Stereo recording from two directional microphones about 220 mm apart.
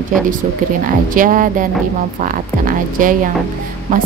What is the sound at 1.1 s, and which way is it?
Speech, 40° right (ahead or behind).